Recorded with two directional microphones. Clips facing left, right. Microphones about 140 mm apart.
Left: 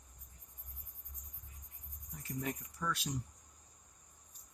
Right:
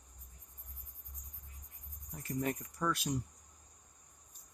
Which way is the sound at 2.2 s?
50° right (ahead or behind).